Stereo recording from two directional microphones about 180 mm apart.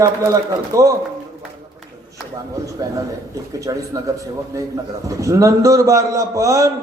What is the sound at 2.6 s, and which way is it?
A man's voice, 20° right (ahead or behind).